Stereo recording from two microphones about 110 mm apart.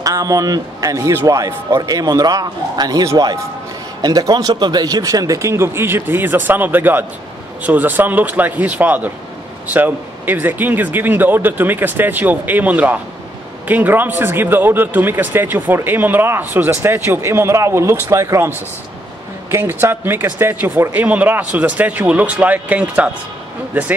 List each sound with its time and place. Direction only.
0.0 s a man's voice: 30° right (ahead or behind)
19.5 s speech: 20° right (ahead or behind)